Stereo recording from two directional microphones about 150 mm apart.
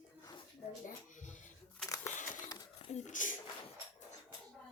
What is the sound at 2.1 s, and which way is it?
Crumpling, 60° left (ahead or behind).